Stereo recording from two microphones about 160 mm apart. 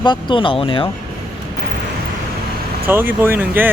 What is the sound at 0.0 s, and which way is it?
Speech, 30° left (ahead or behind).